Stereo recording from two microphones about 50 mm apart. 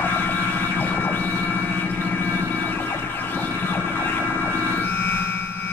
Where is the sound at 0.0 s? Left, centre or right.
Left.